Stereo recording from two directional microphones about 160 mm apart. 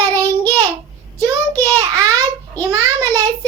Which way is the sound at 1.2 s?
15° left (ahead or behind).